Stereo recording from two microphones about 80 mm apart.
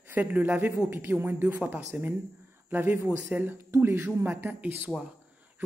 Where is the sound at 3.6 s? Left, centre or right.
Right.